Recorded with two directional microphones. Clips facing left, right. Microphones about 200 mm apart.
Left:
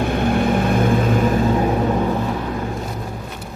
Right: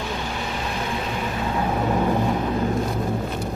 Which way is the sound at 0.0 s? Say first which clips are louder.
Left 11 dB; 55° left (ahead or behind).